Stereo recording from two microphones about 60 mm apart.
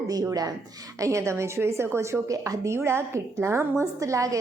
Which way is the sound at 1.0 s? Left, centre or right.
Right.